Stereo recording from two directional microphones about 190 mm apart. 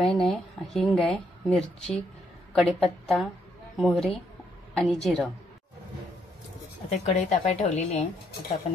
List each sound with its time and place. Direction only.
0.0 s speech: centre (ahead or behind)
7.1 s speech: 35° left (ahead or behind)